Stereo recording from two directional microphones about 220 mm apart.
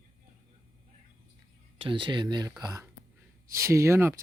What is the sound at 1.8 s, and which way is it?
Speech, 20° right (ahead or behind).